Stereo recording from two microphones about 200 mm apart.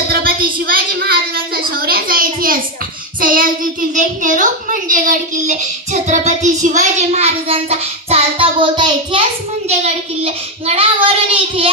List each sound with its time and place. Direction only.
0.1 s a sound: 45° right (ahead or behind)
3.2 s a child's voice: 45° right (ahead or behind)
8.1 s child singing: 25° right (ahead or behind)